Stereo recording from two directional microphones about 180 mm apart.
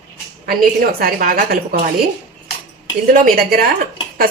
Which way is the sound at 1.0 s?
55° right (ahead or behind).